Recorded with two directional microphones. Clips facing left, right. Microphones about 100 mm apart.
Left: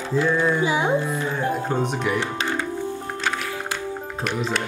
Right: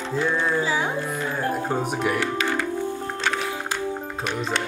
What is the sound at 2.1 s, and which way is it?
Music, 20° left (ahead or behind).